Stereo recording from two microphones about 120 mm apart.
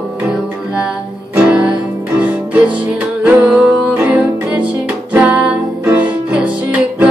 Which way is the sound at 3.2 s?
10° right (ahead or behind).